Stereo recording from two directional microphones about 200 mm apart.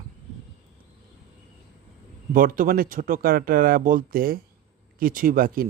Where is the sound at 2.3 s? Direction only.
45° right (ahead or behind).